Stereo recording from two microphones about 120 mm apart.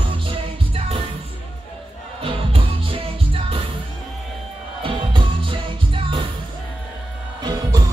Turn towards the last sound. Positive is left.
turn(degrees=-35)  # may be behind; listen again after turning